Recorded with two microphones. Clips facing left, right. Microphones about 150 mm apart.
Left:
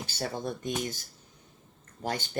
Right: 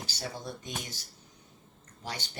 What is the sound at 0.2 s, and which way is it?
Speech, 50° left (ahead or behind).